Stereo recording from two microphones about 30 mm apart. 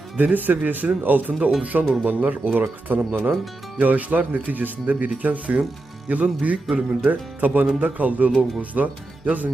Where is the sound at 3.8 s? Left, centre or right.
Right.